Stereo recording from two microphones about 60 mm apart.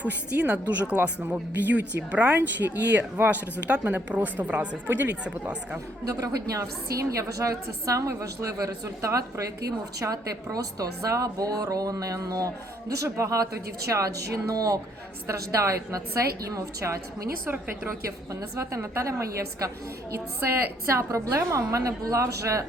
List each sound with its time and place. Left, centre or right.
0.0 s speech: right
6.1 s a woman's voice: right
10.0 s a woman's voice: right
13.0 s a woman's voice: right
13.9 s a woman's voice: right
15.3 s a woman's voice: right
20.5 s a woman's voice: right